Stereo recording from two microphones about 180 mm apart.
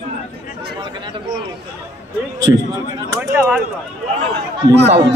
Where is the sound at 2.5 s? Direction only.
10° right (ahead or behind).